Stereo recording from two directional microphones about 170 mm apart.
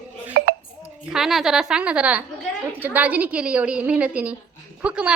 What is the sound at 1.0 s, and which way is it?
A woman's voice, 5° right (ahead or behind).